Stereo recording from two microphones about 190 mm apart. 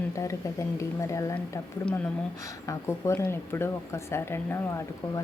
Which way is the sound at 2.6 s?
15° left (ahead or behind).